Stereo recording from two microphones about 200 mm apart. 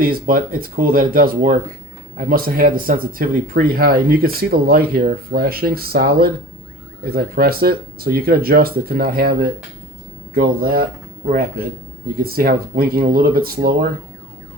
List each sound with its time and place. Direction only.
0.0 s speech: 45° right (ahead or behind)
12.2 s speech: 50° right (ahead or behind)